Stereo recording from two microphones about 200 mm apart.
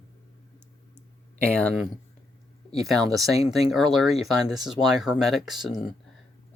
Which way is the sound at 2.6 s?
30° left (ahead or behind).